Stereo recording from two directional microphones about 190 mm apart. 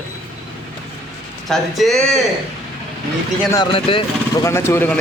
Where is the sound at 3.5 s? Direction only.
25° left (ahead or behind).